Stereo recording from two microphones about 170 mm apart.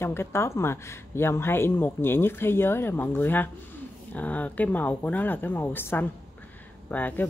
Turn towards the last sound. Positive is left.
turn(degrees=10)  # may be behind; listen again after turning